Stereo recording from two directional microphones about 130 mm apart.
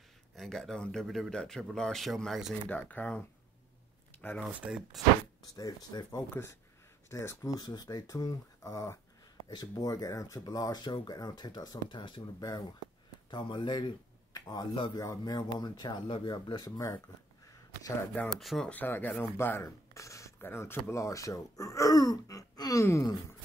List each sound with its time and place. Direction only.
0.4 s speech: 5° left (ahead or behind)
2.7 s speech: 15° left (ahead or behind)
4.5 s speech: 10° right (ahead or behind)
5.6 s speech: 25° left (ahead or behind)
18.4 s speech: centre (ahead or behind)
18.7 s speech: 15° left (ahead or behind)